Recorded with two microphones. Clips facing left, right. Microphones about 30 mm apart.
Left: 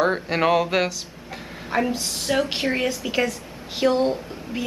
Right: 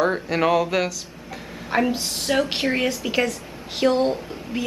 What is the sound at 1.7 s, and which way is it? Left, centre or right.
A woman's voice, centre.